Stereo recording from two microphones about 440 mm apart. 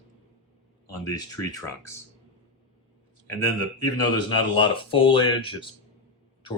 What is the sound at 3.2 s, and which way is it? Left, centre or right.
Speech, centre.